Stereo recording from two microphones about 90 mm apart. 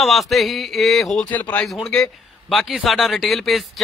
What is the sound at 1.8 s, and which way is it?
A man's voice, 5° left (ahead or behind).